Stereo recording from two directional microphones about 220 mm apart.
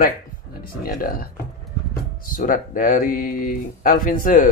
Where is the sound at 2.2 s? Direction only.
40° left (ahead or behind).